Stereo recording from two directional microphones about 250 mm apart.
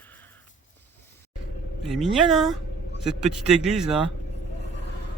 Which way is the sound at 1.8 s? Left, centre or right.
Centre.